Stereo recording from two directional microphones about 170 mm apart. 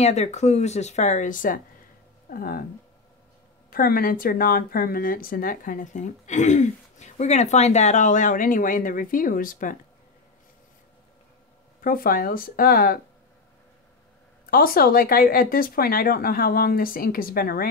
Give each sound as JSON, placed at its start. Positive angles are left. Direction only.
{"t": 0.0, "sound": "speech", "side_deg": 40}
{"t": 3.7, "sound": "speech", "side_deg": 60}
{"t": 11.8, "sound": "speech", "side_deg": 55}
{"t": 14.5, "sound": "speech", "side_deg": 60}